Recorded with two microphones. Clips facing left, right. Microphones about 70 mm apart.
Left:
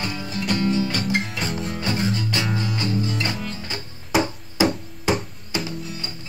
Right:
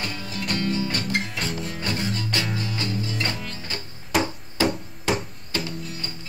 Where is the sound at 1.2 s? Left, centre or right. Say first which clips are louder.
Left 2 dB; centre.